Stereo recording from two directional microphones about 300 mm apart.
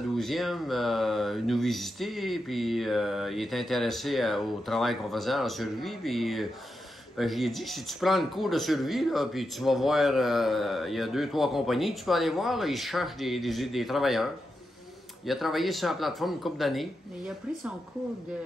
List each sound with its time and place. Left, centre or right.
0.2 s speech: centre